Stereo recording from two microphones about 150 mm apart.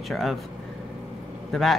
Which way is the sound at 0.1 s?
Centre (ahead or behind).